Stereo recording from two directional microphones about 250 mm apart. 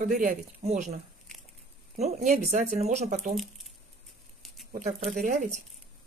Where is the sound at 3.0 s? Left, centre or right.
Right.